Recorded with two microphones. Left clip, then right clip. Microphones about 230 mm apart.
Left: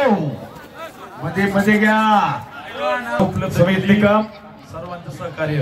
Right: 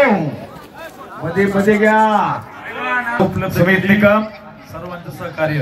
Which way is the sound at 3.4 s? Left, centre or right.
Left.